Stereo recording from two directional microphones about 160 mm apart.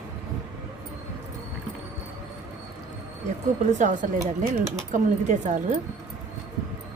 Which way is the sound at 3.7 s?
50° right (ahead or behind).